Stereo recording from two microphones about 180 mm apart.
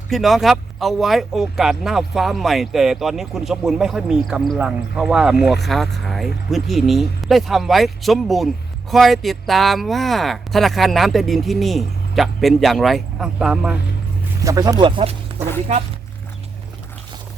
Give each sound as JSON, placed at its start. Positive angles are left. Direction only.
{"t": 0.1, "sound": "speech", "side_deg": 0}
{"t": 14.4, "sound": "speech", "side_deg": -20}
{"t": 15.7, "sound": "speech", "side_deg": -40}